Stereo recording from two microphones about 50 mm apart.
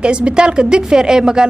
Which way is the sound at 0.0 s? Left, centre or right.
Centre.